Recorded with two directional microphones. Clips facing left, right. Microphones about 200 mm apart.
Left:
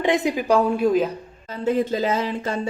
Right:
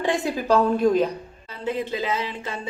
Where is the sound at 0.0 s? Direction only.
20° left (ahead or behind).